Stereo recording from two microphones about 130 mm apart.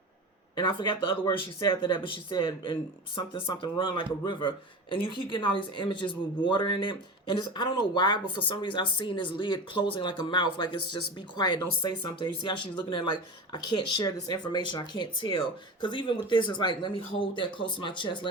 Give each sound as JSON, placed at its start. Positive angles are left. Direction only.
{"t": 0.5, "sound": "speech", "side_deg": 35}